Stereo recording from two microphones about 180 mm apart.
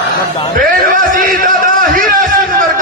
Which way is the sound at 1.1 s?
50° right (ahead or behind).